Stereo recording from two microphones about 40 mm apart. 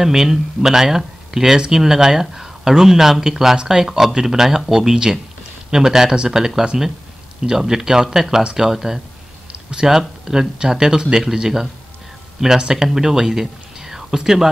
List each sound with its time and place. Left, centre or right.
0.0 s speech: centre
9.5 s a sound: right
9.8 s speech: centre